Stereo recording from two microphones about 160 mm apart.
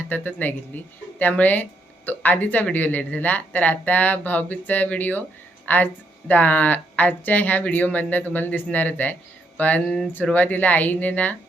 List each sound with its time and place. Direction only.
0.1 s speech: 10° left (ahead or behind)